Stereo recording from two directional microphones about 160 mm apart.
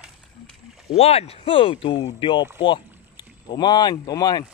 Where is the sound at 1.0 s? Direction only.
40° left (ahead or behind); by 4.4 s 25° left (ahead or behind).